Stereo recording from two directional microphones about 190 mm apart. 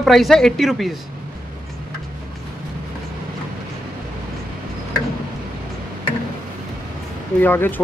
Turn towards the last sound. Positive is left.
turn(degrees=10)  # may be behind; listen again after turning